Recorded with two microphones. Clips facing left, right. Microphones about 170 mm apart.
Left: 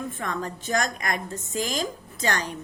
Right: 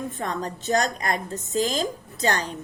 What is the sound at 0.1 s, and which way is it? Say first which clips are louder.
A woman's voice: right 2 dB; 35° right (ahead or behind).